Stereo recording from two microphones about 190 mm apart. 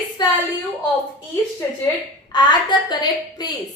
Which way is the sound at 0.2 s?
20° left (ahead or behind).